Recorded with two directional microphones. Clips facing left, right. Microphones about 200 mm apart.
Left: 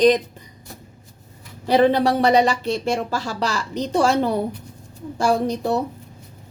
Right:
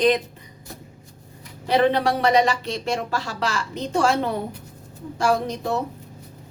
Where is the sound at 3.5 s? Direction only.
35° left (ahead or behind).